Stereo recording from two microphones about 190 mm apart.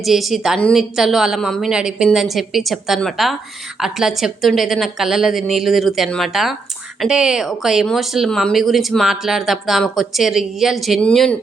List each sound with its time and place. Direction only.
0.0 s speech: centre (ahead or behind)